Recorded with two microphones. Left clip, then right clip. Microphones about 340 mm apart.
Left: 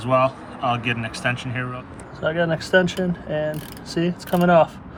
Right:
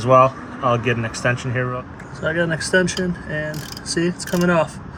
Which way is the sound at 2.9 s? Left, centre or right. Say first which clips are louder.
Even; centre.